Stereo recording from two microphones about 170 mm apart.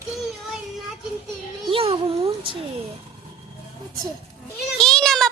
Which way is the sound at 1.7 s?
35° right (ahead or behind).